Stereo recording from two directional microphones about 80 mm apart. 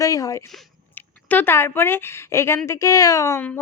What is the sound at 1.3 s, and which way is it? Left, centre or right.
A woman's voice, left.